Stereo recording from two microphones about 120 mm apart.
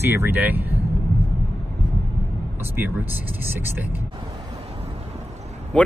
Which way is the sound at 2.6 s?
20° right (ahead or behind).